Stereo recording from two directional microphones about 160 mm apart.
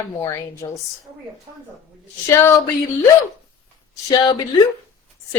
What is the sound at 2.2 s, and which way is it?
Speech, 20° left (ahead or behind).